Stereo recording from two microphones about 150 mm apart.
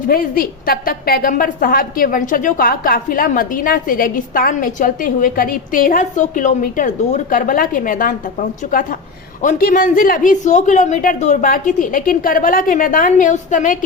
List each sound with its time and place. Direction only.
0.1 s a woman's voice: 75° left (ahead or behind); by 13.7 s 60° left (ahead or behind)